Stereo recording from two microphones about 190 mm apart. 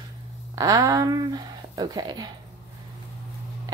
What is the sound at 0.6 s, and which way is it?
Speech, 20° right (ahead or behind).